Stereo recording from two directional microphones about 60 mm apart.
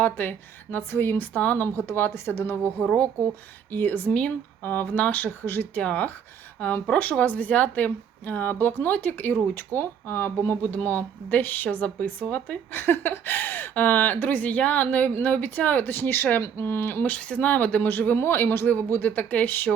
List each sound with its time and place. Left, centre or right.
0.0 s speech: left
1.4 s a woman's voice: left
1.6 s a woman's voice: left
2.8 s speech: centre
3.7 s a woman's voice: left
10.6 s a woman's voice: left
12.7 s speech: left
17.1 s a woman's voice: centre